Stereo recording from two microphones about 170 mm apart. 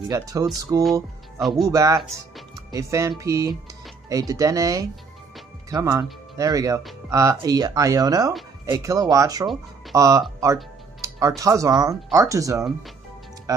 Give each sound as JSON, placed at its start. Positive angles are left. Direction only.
{"t": 0.1, "sound": "speech", "side_deg": -20}
{"t": 13.5, "sound": "music", "side_deg": -20}